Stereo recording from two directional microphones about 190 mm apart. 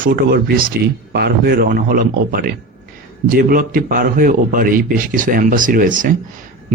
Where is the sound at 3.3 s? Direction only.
50° right (ahead or behind).